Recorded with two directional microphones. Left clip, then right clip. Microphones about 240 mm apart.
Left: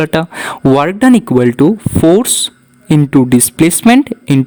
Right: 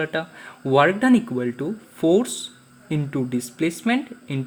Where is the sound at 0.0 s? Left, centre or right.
Left.